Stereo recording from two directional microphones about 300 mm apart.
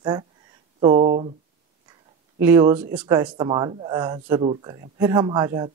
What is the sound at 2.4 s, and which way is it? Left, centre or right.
Speech, centre.